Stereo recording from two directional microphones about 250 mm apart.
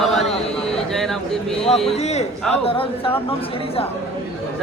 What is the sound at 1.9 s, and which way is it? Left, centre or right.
Speech, left.